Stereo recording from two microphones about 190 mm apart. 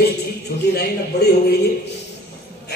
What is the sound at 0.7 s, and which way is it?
Speech, 60° left (ahead or behind).